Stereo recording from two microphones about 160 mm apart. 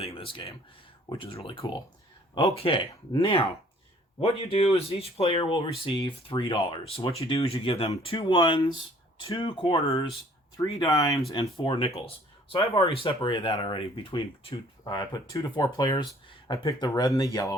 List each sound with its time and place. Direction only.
0.2 s speech: 35° left (ahead or behind)
12.5 s speech: 20° left (ahead or behind)
13.0 s speech: 30° left (ahead or behind)